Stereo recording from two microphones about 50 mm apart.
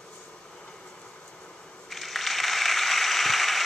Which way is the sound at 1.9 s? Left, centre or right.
Centre.